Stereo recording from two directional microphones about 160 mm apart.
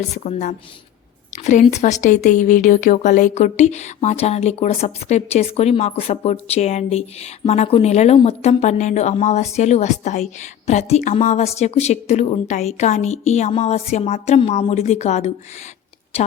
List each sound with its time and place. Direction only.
0.3 s a woman's voice: 50° left (ahead or behind)